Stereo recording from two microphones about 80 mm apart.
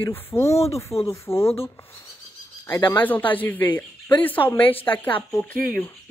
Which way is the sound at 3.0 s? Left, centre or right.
Left.